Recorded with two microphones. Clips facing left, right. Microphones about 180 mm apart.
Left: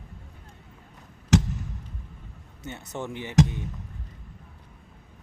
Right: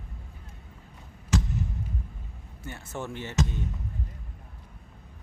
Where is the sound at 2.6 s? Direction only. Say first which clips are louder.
Left 2 dB; 20° left (ahead or behind).